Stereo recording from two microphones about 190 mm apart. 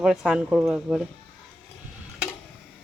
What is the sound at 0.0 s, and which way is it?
Speech, centre (ahead or behind).